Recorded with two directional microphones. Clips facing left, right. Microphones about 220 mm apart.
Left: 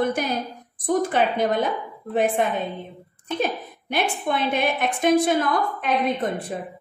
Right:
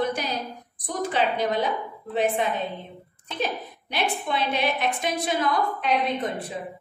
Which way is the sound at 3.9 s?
50° left (ahead or behind).